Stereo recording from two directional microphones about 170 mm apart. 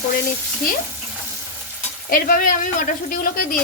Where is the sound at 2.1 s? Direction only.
60° left (ahead or behind).